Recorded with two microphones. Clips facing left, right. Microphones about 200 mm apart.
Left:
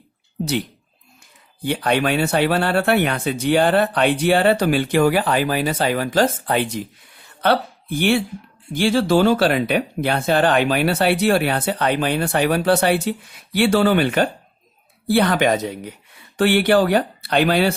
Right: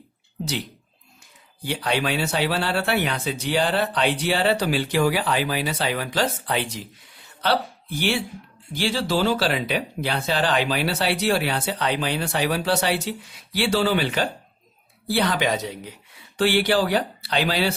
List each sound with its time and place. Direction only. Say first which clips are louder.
1.6 s speech: left 5 dB; 55° left (ahead or behind)